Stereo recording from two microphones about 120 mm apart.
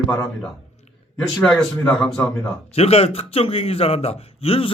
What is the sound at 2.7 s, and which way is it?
A man's voice, 55° left (ahead or behind).